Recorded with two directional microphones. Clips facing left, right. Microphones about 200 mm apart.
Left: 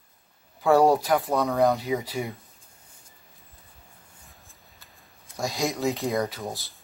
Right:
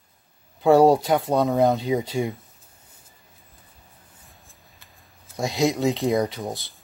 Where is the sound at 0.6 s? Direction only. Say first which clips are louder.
Right 4 dB; 25° right (ahead or behind).